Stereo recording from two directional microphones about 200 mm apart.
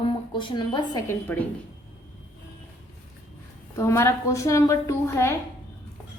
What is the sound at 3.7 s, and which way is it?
A woman's voice, 15° left (ahead or behind).